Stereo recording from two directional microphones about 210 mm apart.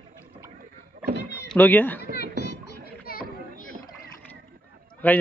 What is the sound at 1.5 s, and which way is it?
Speech, 10° left (ahead or behind).